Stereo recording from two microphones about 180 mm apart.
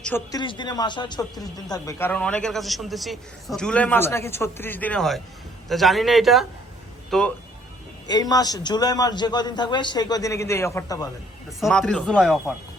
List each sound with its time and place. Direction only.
0.3 s a man's voice: 25° left (ahead or behind); by 7.3 s 5° left (ahead or behind)
8.0 s a man's voice: 20° left (ahead or behind)
11.6 s a man's voice: 5° left (ahead or behind)